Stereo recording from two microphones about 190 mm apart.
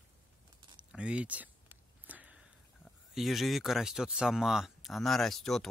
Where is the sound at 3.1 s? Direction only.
Centre (ahead or behind).